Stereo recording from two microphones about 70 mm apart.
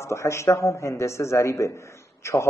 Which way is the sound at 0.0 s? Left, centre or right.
Left.